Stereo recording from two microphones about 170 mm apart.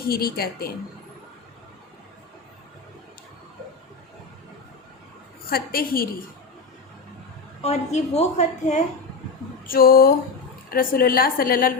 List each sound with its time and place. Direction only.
0.1 s a woman's voice: 60° left (ahead or behind)
5.5 s a woman's voice: 60° left (ahead or behind)
7.6 s a woman's voice: 40° left (ahead or behind)
9.6 s a woman's voice: 60° left (ahead or behind)